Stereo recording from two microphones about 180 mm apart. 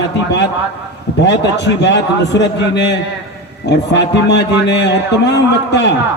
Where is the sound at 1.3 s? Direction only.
70° left (ahead or behind).